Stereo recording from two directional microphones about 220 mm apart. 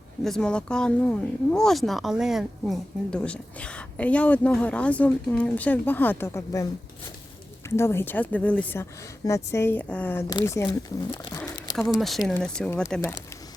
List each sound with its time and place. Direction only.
0.3 s speech: 5° left (ahead or behind)
7.7 s speech: 10° left (ahead or behind)
11.3 s a sound: 15° left (ahead or behind)
11.8 s speech: centre (ahead or behind)